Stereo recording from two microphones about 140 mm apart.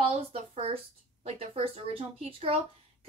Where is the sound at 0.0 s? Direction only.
45° right (ahead or behind).